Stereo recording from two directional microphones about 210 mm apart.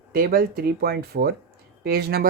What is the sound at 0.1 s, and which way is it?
Speech, 45° right (ahead or behind).